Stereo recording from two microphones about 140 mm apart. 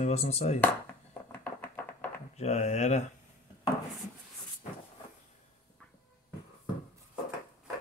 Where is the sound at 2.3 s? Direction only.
50° left (ahead or behind).